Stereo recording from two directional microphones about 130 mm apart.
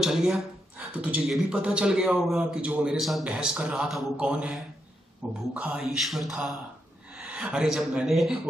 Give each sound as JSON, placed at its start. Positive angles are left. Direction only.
{"t": 0.0, "sound": "a man's voice", "side_deg": -5}